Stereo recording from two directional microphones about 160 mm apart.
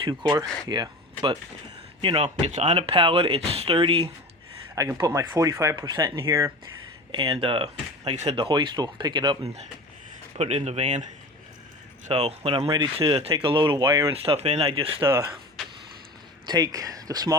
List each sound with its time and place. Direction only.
0.0 s speech: 30° right (ahead or behind)
4.9 s speech: 25° right (ahead or behind); by 8.4 s 45° right (ahead or behind)
8.4 s speech: 30° right (ahead or behind)
10.3 s speech: 40° right (ahead or behind)
12.0 s speech: 40° right (ahead or behind)
12.6 s speech: 20° right (ahead or behind)
13.0 s speech: 35° right (ahead or behind)
13.8 s speech: 20° right (ahead or behind)
14.1 s speech: 35° right (ahead or behind)
16.5 s speech: 25° right (ahead or behind)